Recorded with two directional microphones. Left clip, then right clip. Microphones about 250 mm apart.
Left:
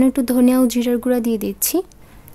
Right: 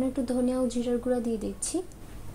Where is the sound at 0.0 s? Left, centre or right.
Left.